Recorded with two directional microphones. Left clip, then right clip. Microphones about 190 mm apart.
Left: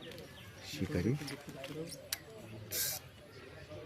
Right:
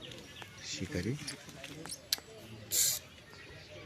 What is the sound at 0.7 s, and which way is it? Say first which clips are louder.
Speech: left 2 dB; 5° left (ahead or behind).